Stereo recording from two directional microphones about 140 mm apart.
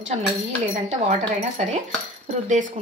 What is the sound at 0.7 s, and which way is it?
Speech, 45° right (ahead or behind).